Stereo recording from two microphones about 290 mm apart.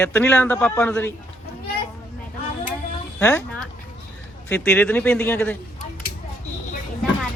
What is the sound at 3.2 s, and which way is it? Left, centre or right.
Speech, centre.